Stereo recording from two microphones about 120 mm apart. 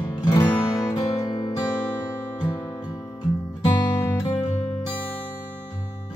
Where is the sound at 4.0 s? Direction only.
25° left (ahead or behind).